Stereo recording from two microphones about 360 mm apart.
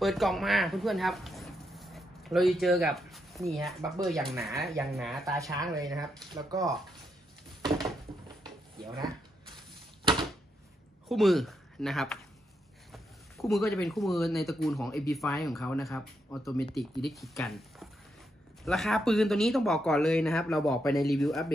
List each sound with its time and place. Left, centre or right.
0.0 s speech: centre
11.1 s speech: centre